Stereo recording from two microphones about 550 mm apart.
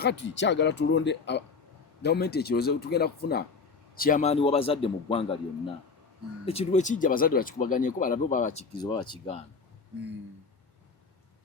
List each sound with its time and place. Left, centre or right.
0.0 s speech: centre
6.4 s speech: centre